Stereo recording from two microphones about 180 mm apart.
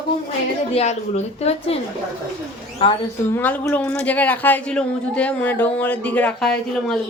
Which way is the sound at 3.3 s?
10° left (ahead or behind).